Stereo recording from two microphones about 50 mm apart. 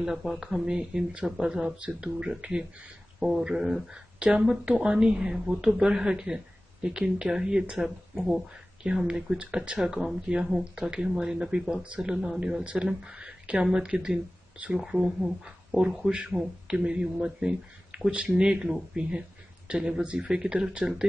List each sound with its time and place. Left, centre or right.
0.0 s a woman's voice: centre
4.2 s a woman's voice: right
9.8 s a woman's voice: centre